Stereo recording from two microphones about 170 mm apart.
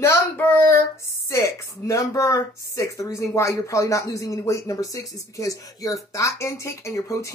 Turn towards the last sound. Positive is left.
turn(degrees=15)  # may be behind; listen again after turning